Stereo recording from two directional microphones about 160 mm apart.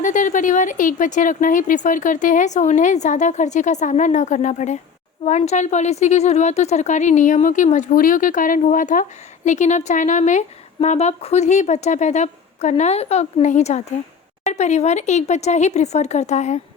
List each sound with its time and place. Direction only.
0.0 s a woman's voice: 50° left (ahead or behind)